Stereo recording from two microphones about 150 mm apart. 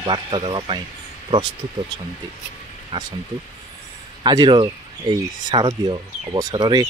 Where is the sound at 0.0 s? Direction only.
30° right (ahead or behind).